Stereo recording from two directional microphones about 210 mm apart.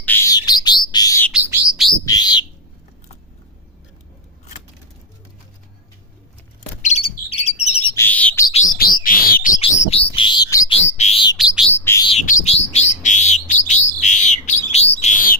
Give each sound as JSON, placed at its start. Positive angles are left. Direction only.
{"t": 0.0, "sound": "bird", "side_deg": 10}
{"t": 1.3, "sound": "bird", "side_deg": -5}
{"t": 2.0, "sound": "bird", "side_deg": 20}
{"t": 6.8, "sound": "bird", "side_deg": 30}
{"t": 7.9, "sound": "bird", "side_deg": 10}
{"t": 8.5, "sound": "bird", "side_deg": 40}
{"t": 9.6, "sound": "bird", "side_deg": 25}
{"t": 10.8, "sound": "bird", "side_deg": 30}
{"t": 11.3, "sound": "bird", "side_deg": -5}
{"t": 11.7, "sound": "bird", "side_deg": 10}
{"t": 12.2, "sound": "bird", "side_deg": 35}